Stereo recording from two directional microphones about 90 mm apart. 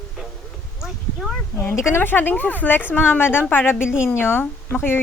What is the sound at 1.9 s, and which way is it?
A woman's voice, 25° left (ahead or behind).